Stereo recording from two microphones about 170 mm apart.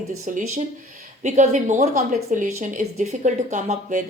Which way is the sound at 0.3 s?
50° right (ahead or behind).